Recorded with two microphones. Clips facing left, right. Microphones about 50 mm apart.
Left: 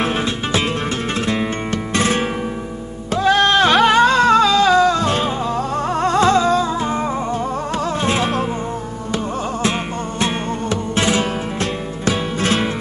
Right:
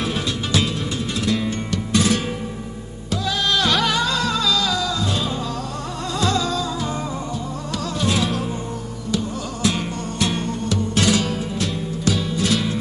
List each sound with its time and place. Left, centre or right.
0.0 s music: left
8.0 s flamenco: left
9.1 s music: left